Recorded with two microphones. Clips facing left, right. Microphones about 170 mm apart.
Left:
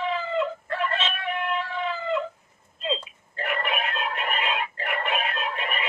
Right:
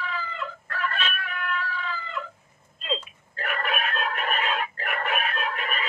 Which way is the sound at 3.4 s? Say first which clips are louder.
Left 1 dB; 20° left (ahead or behind).